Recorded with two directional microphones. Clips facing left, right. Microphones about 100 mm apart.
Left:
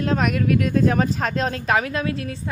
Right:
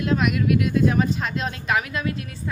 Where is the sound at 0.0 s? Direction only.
40° left (ahead or behind).